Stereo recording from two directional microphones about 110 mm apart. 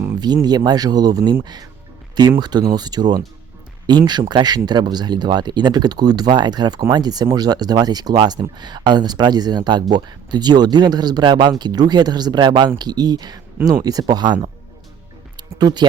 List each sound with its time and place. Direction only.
0.4 s speech: 40° right (ahead or behind)
2.4 s speech: 40° right (ahead or behind)
15.4 s speech: 40° right (ahead or behind)